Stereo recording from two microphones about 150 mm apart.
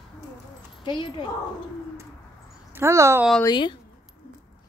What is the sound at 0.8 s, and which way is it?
Speech, 30° left (ahead or behind).